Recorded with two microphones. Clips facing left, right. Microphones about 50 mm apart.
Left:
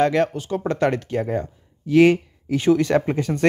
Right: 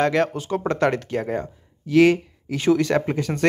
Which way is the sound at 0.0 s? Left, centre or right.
Centre.